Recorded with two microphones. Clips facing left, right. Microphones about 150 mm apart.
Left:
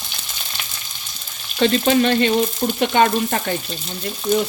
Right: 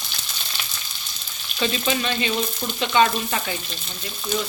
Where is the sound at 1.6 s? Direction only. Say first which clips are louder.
Left 8 dB; 60° left (ahead or behind).